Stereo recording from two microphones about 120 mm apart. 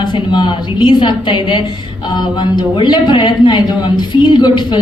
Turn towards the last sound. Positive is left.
turn(degrees=40)  # may be behind; listen again after turning